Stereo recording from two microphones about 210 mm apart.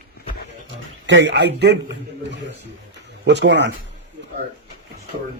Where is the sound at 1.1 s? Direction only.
55° right (ahead or behind).